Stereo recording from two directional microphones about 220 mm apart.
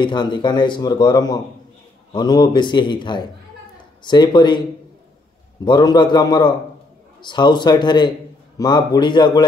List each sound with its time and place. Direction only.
0.0 s speech: 20° left (ahead or behind)
5.7 s speech: 20° left (ahead or behind)